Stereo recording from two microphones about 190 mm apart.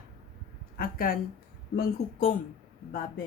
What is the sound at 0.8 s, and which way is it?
Speech, 50° left (ahead or behind).